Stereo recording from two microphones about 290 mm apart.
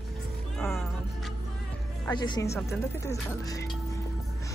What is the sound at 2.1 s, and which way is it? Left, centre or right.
Speech, centre.